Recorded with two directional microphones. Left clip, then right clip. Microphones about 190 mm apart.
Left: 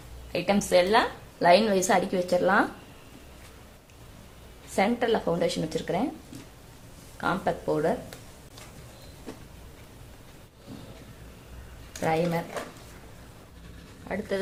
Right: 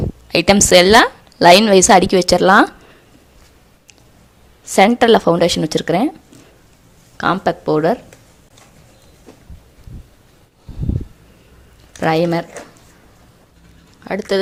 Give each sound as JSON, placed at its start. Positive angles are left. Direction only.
{"t": 0.3, "sound": "a woman's voice", "side_deg": -45}
{"t": 4.7, "sound": "a woman's voice", "side_deg": -50}
{"t": 7.2, "sound": "a woman's voice", "side_deg": -50}
{"t": 12.0, "sound": "a woman's voice", "side_deg": -55}
{"t": 14.0, "sound": "a woman's voice", "side_deg": -45}